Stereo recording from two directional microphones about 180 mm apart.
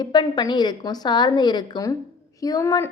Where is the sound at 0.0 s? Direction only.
25° left (ahead or behind).